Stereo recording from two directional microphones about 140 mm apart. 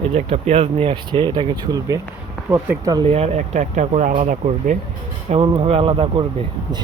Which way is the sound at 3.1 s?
50° right (ahead or behind).